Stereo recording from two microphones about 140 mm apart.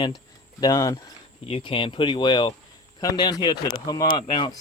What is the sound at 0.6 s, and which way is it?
Speech, 25° left (ahead or behind).